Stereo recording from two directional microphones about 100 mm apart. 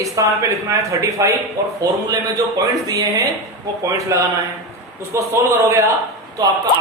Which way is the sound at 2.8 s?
40° right (ahead or behind).